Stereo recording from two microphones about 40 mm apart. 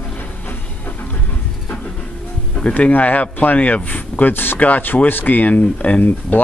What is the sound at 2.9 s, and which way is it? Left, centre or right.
Speech, left.